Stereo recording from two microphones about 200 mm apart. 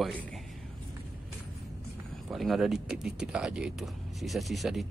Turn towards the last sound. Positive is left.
turn(degrees=0)  # may be behind; listen again after turning